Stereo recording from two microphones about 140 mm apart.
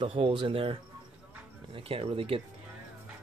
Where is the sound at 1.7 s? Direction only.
40° right (ahead or behind).